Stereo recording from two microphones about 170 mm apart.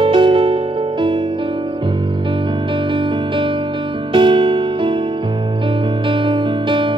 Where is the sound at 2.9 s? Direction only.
30° right (ahead or behind).